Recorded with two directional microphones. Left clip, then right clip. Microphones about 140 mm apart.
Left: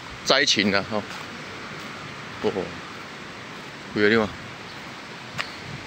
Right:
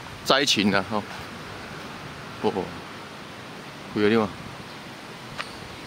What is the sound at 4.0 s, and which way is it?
Speech, 15° right (ahead or behind).